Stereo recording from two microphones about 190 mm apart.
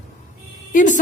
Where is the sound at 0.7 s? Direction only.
40° left (ahead or behind).